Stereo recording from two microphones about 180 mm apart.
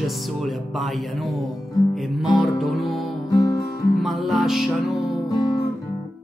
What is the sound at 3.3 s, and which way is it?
Music, 20° left (ahead or behind).